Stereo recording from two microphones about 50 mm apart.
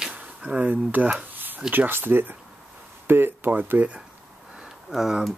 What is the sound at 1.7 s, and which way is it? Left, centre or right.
Speech, right.